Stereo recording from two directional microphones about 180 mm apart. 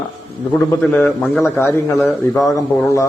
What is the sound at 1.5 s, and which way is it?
Speech, 15° left (ahead or behind).